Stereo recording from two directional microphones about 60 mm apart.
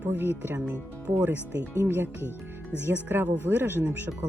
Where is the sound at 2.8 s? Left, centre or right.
Right.